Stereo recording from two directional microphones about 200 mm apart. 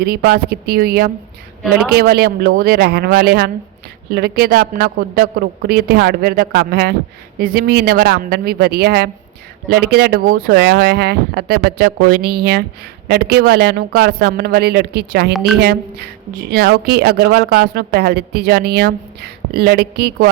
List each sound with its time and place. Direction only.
0.0 s speech: 50° right (ahead or behind)